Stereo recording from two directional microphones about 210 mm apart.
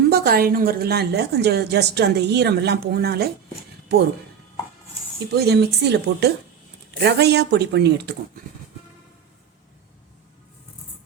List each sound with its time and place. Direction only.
0.1 s a woman's voice: 50° right (ahead or behind)
5.4 s a woman's voice: 50° right (ahead or behind)